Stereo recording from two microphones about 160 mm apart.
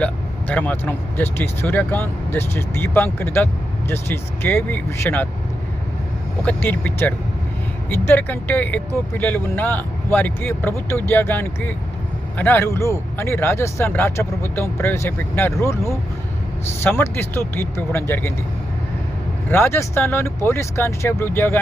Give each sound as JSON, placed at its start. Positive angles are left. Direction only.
{"t": 0.0, "sound": "speech", "side_deg": 10}
{"t": 6.4, "sound": "speech", "side_deg": 10}
{"t": 19.5, "sound": "speech", "side_deg": 15}